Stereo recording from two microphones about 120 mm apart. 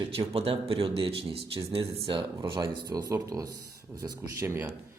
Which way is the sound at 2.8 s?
35° right (ahead or behind).